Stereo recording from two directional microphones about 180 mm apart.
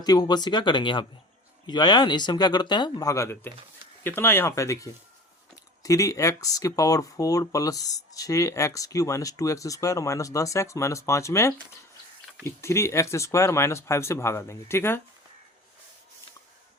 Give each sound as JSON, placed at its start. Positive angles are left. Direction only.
{"t": 0.0, "sound": "speech", "side_deg": 20}